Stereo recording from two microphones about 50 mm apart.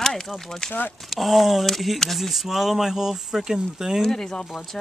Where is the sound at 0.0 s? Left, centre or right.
Centre.